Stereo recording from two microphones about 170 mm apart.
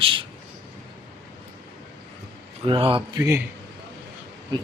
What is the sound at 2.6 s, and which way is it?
Speech, 30° right (ahead or behind).